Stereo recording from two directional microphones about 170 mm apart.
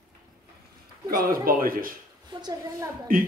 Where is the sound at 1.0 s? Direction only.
55° right (ahead or behind).